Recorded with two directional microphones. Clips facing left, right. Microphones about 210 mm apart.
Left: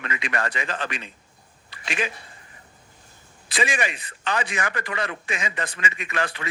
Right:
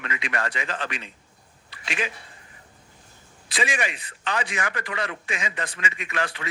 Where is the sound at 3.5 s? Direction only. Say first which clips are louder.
Left 2 dB; 45° left (ahead or behind).